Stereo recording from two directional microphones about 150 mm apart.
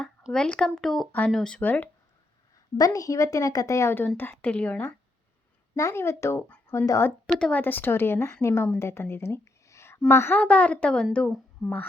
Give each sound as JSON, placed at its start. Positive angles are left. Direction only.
{"t": 0.2, "sound": "speech", "side_deg": 0}
{"t": 2.7, "sound": "a woman's voice", "side_deg": 25}
{"t": 7.3, "sound": "a woman's voice", "side_deg": 5}
{"t": 8.8, "sound": "a sound", "side_deg": 15}
{"t": 10.1, "sound": "a woman's voice", "side_deg": 15}